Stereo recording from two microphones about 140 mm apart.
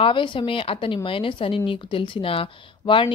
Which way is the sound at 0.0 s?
35° left (ahead or behind).